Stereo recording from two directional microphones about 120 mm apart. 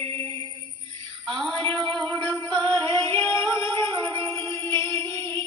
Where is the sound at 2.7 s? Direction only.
20° left (ahead or behind).